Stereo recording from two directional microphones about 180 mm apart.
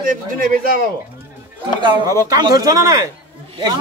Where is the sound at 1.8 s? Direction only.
25° right (ahead or behind).